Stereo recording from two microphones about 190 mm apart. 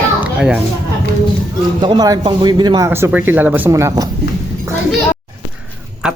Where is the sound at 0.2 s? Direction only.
5° right (ahead or behind).